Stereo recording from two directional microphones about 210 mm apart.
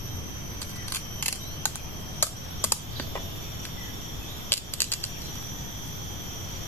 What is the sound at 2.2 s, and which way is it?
Computer keyboard, 10° left (ahead or behind).